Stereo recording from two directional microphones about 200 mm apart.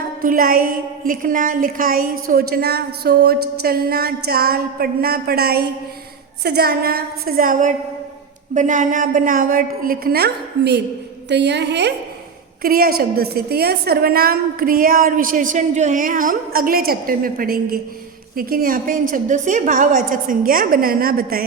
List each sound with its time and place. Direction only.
0.2 s a woman's voice: 45° right (ahead or behind)
12.6 s a woman's voice: 50° right (ahead or behind)